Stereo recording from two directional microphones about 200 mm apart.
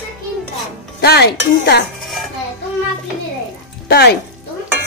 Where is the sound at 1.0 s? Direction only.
55° left (ahead or behind).